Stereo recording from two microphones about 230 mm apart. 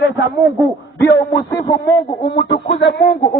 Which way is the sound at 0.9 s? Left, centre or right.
Centre.